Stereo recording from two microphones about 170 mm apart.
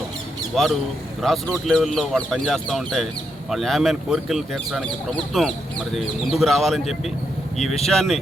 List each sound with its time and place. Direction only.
0.5 s speech: centre (ahead or behind)